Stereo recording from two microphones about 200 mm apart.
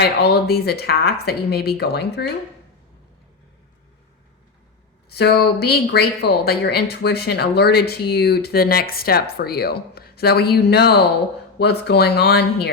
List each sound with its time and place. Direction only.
0.2 s speech: 55° left (ahead or behind)
5.0 s speech: 55° left (ahead or behind)